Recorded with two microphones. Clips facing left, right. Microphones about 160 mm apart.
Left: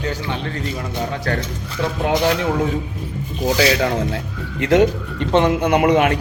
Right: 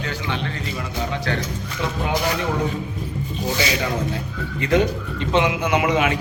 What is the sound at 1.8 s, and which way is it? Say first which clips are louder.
Speech: left 4 dB; 40° left (ahead or behind).